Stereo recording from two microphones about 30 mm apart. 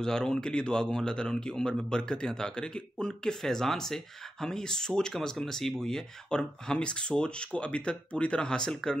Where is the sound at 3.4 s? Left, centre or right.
Centre.